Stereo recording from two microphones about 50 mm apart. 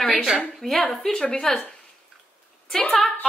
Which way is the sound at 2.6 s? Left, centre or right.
Centre.